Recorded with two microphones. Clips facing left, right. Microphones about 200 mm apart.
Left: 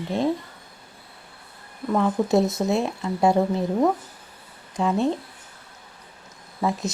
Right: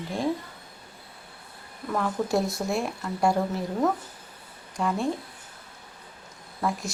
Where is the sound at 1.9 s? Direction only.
20° left (ahead or behind).